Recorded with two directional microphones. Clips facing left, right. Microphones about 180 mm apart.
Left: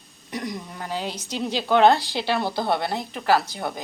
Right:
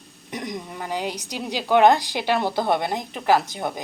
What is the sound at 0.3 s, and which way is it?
Speech, 20° right (ahead or behind).